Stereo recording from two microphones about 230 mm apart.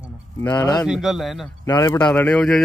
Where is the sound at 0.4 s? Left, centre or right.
Centre.